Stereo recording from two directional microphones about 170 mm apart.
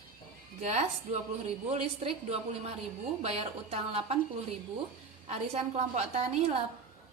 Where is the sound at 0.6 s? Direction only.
45° right (ahead or behind).